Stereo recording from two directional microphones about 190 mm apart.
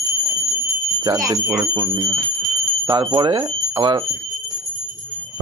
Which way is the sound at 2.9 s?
25° right (ahead or behind).